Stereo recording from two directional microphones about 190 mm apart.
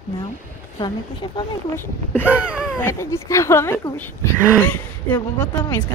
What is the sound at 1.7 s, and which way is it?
Speech, 10° left (ahead or behind).